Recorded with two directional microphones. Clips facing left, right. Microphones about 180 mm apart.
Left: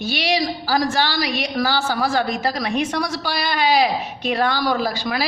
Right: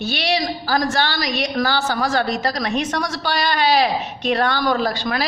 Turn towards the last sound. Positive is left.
turn(degrees=10)  # may be behind; listen again after turning